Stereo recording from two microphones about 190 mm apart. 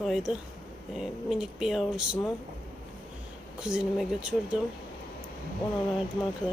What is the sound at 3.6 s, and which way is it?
Speech, 5° right (ahead or behind).